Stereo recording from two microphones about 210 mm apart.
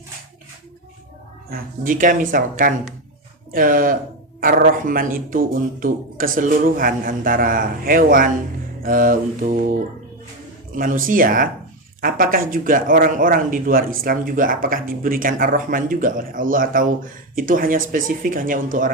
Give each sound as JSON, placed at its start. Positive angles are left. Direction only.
{"t": 1.5, "sound": "speech", "side_deg": -45}
{"t": 10.8, "sound": "speech", "side_deg": -40}